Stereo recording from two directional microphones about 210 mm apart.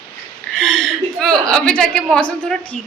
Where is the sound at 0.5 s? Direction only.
5° left (ahead or behind).